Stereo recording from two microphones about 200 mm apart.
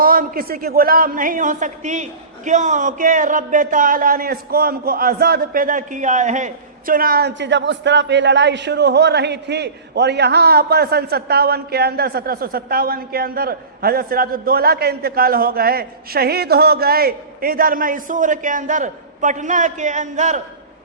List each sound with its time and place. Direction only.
0.0 s a man's voice: 45° right (ahead or behind)